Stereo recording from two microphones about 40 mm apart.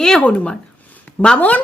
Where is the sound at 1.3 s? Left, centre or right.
Left.